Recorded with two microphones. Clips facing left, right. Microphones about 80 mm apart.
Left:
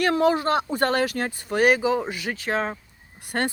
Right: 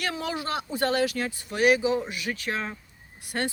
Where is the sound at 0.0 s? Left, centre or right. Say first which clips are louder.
Left 10 dB; left.